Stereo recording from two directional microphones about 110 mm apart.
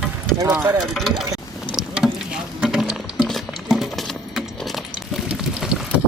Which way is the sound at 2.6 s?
5° right (ahead or behind).